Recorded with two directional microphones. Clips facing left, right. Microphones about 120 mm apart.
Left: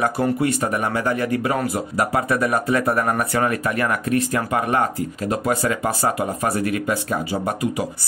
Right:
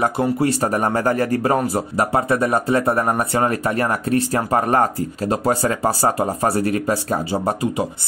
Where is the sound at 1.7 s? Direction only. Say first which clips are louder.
Right 2 dB; 30° right (ahead or behind).